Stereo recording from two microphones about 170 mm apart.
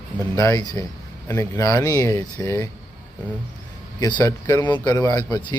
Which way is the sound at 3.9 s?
25° left (ahead or behind).